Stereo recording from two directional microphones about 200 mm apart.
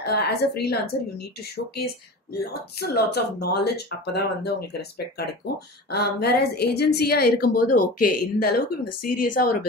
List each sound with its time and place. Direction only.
0.0 s a woman's voice: 55° left (ahead or behind)
2.8 s a woman's voice: 50° left (ahead or behind)